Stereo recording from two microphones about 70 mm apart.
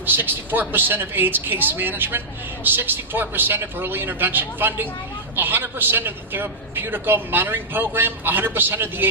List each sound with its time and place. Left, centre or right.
0.0 s a man's voice: right